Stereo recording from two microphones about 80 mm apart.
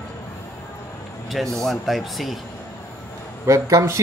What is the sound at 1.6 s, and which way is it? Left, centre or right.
Speech, centre.